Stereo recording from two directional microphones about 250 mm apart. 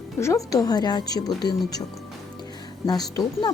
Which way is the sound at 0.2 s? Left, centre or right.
Centre.